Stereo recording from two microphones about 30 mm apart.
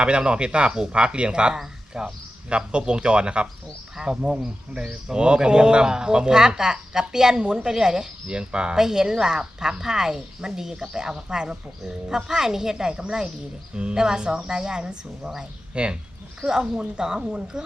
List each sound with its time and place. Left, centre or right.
0.0 s speech: right
2.0 s speech: centre
2.5 s speech: right
3.9 s speech: right
8.7 s speech: centre
12.7 s speech: right
16.5 s speech: right